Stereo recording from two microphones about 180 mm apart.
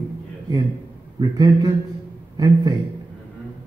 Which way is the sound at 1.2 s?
20° right (ahead or behind).